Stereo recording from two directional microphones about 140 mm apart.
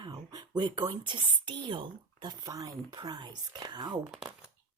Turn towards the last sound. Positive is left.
turn(degrees=-10)  # may be behind; listen again after turning